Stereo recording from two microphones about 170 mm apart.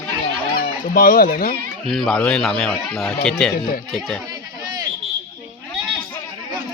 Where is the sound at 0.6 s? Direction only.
55° left (ahead or behind).